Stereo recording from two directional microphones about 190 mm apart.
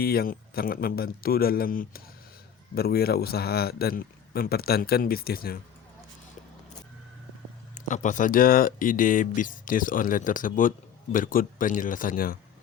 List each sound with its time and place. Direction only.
0.0 s a man's voice: 55° left (ahead or behind)
7.9 s speech: 40° left (ahead or behind)